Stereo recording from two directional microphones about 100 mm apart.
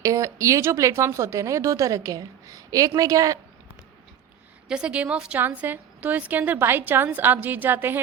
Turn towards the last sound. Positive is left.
turn(degrees=-20)  # may be behind; listen again after turning